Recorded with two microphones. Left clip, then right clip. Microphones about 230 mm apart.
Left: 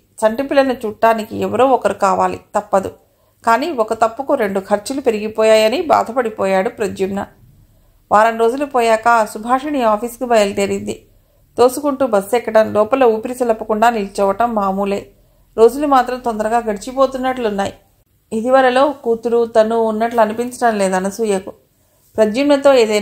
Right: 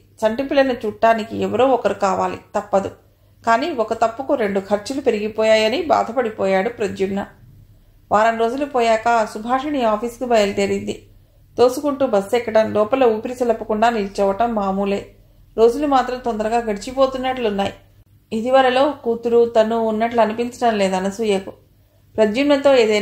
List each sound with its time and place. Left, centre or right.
0.2 s speech: left